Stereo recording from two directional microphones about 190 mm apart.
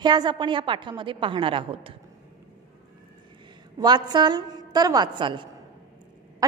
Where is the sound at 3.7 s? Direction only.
20° right (ahead or behind).